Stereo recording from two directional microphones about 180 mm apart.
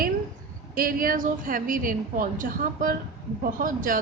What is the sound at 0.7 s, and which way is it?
A woman's voice, 50° right (ahead or behind).